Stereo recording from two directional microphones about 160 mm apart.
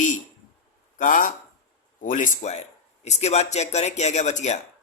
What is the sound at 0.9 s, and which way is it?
Speech, 55° left (ahead or behind).